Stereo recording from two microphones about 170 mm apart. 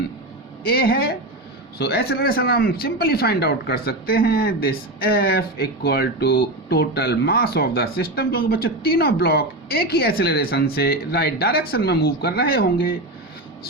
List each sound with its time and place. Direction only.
0.6 s speech: 65° left (ahead or behind)